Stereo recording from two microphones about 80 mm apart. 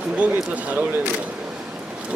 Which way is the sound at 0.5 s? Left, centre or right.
Right.